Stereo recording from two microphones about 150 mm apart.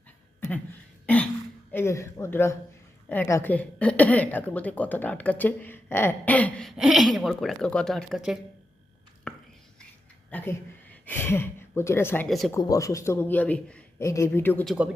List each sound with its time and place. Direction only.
1.0 s a sound: 10° left (ahead or behind)
1.7 s a woman's voice: 15° left (ahead or behind); by 8.4 s centre (ahead or behind)
9.3 s whispering: 5° left (ahead or behind)
10.2 s a woman's voice: 15° left (ahead or behind)